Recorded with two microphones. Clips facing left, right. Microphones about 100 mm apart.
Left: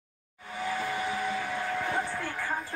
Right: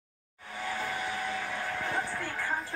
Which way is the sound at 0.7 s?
10° left (ahead or behind).